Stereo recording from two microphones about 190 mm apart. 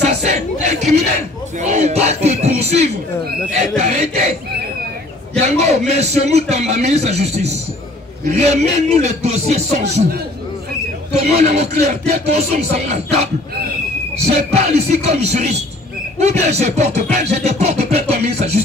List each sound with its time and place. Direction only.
0.0 s a sound: 35° right (ahead or behind)
3.7 s music: 35° right (ahead or behind)
5.4 s music: 35° right (ahead or behind)
11.1 s music: 35° right (ahead or behind)
14.5 s music: 35° right (ahead or behind)